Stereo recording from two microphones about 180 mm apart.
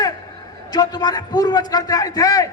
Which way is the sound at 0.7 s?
20° left (ahead or behind).